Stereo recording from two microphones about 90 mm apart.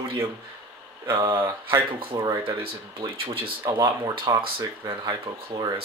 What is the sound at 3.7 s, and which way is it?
Speech, 45° right (ahead or behind).